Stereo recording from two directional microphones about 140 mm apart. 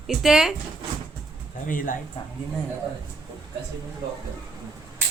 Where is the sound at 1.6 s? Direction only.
70° left (ahead or behind).